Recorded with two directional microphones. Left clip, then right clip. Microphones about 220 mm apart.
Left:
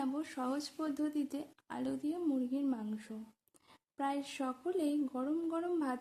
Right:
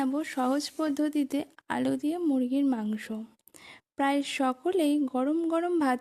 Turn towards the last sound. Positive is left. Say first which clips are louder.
# right 10 dB
turn(degrees=-35)  # may be behind; listen again after turning